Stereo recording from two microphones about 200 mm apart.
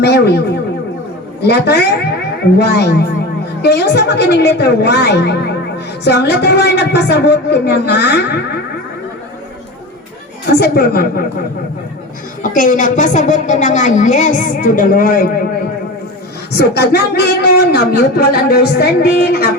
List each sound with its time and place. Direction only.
0.0 s effects unit: 55° left (ahead or behind)
1.4 s a man's voice: 55° left (ahead or behind)
10.6 s speech: 50° left (ahead or behind)
12.4 s a woman's voice: 40° left (ahead or behind)
16.6 s speech: 55° left (ahead or behind)